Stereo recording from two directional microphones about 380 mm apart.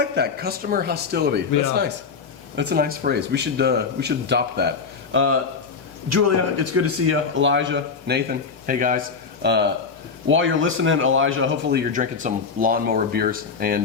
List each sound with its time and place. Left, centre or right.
0.0 s a man's voice: right
2.6 s a man's voice: right